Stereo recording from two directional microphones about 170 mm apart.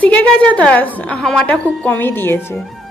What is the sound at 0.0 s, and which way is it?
A woman's voice, 10° left (ahead or behind).